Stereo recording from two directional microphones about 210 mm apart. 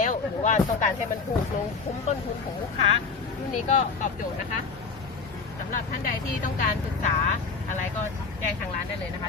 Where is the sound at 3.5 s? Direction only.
35° left (ahead or behind).